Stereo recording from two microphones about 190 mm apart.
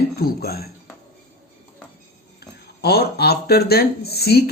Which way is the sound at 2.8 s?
55° left (ahead or behind).